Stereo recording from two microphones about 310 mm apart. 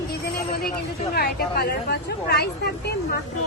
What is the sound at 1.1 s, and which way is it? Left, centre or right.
A woman's voice, left.